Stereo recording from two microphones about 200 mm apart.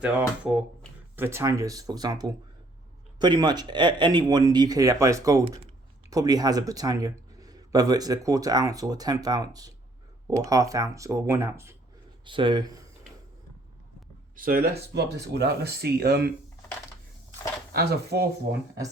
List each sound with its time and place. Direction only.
0.0 s speech: 5° right (ahead or behind)
12.2 s speech: 25° right (ahead or behind)
14.3 s speech: 45° right (ahead or behind)
17.7 s speech: 55° right (ahead or behind)